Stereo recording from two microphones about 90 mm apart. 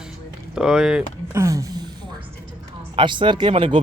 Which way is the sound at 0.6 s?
5° right (ahead or behind).